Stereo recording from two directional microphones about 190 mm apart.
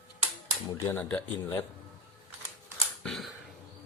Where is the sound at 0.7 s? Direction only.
10° left (ahead or behind).